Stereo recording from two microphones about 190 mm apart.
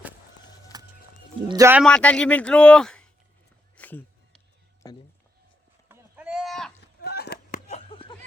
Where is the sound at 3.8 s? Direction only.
10° left (ahead or behind).